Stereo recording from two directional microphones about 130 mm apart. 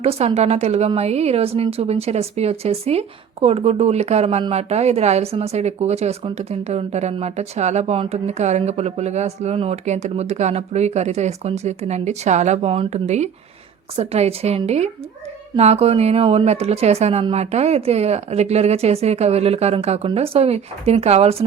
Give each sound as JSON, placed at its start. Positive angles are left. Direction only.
{"t": 0.0, "sound": "a woman's voice", "side_deg": -50}